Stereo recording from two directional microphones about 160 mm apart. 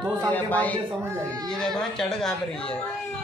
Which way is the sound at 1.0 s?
15° right (ahead or behind).